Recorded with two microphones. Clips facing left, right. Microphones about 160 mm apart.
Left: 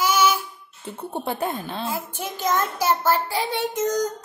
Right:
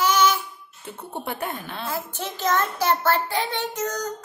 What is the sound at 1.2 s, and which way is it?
Speech, 30° left (ahead or behind).